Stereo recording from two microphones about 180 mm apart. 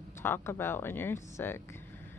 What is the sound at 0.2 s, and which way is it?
Speech, 10° left (ahead or behind).